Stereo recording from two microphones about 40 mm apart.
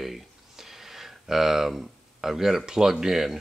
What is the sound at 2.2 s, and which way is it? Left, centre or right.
Speech, centre.